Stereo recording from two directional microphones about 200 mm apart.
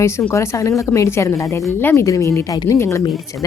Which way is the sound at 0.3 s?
15° left (ahead or behind).